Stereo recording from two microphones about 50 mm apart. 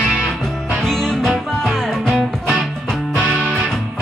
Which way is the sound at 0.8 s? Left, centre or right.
Centre.